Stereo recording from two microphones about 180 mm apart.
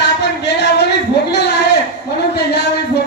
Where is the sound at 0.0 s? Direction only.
70° left (ahead or behind).